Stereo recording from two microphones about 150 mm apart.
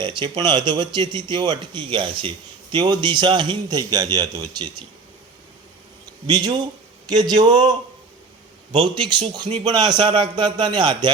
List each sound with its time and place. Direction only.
0.0 s a man's voice: 30° right (ahead or behind)
6.2 s a man's voice: 25° right (ahead or behind)
8.8 s a man's voice: 30° right (ahead or behind)